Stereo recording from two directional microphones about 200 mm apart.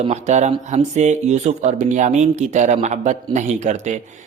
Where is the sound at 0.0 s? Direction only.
35° right (ahead or behind).